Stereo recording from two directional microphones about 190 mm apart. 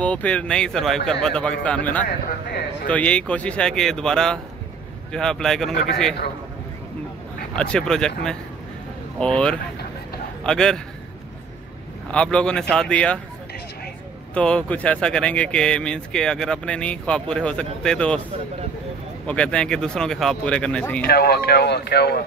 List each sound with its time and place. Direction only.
0.0 s speech: 5° left (ahead or behind)
7.5 s speech: 5° left (ahead or behind)
9.2 s speech: 5° left (ahead or behind)
12.1 s speech: 5° left (ahead or behind)
14.3 s speech: 5° left (ahead or behind)
19.2 s speech: 5° left (ahead or behind)
21.1 s speech: 55° left (ahead or behind)